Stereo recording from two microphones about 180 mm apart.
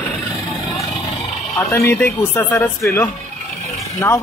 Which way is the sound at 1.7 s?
15° left (ahead or behind).